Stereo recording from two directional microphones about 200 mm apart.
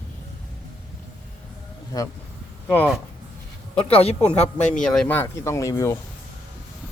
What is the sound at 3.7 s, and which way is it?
Speech, 30° left (ahead or behind).